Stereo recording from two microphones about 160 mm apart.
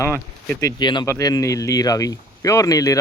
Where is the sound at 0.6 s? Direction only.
25° left (ahead or behind).